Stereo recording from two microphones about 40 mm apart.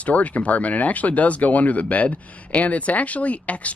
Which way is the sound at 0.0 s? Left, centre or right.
Left.